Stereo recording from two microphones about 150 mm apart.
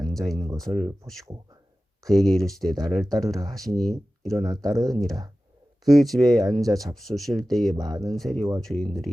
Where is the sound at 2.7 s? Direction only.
25° right (ahead or behind).